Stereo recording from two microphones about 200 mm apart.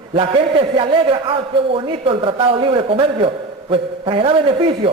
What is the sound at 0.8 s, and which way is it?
A man's voice, 25° right (ahead or behind).